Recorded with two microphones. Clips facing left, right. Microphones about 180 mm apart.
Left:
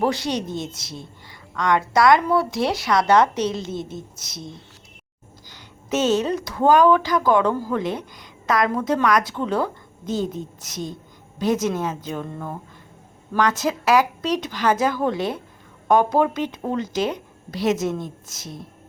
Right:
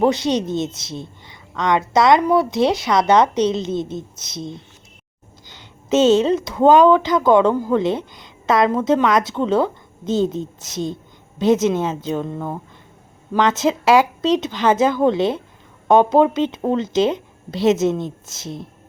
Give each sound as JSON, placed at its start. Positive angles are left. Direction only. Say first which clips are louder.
{"t": 0.0, "sound": "speech", "louder": "right 5 dB", "side_deg": -20}